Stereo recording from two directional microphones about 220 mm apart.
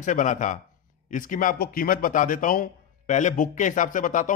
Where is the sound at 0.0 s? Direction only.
35° left (ahead or behind).